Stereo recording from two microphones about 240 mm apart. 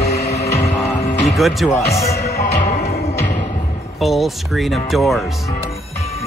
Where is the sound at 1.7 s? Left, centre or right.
Centre.